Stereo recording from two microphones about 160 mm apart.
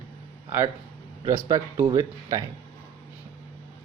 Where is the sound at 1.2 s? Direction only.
20° right (ahead or behind).